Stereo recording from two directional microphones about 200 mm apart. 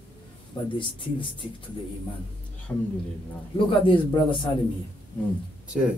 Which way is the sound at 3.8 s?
25° left (ahead or behind).